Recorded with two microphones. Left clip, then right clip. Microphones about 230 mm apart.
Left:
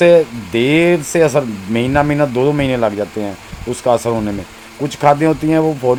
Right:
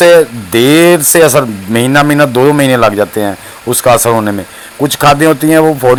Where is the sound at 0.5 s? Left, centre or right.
Right.